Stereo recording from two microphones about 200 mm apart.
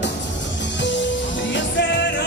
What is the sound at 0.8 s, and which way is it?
Music, 65° left (ahead or behind).